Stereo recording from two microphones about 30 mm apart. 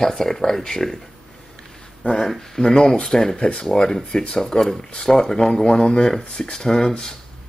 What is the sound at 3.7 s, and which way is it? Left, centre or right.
Speech, left.